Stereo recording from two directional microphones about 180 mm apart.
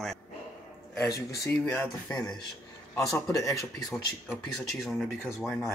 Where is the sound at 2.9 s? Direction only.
5° left (ahead or behind).